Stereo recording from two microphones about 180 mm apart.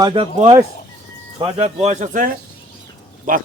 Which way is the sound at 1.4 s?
30° right (ahead or behind).